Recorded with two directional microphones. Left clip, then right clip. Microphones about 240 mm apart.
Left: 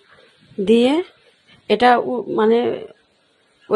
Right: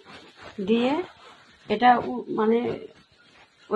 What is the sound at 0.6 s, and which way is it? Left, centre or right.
Speech, left.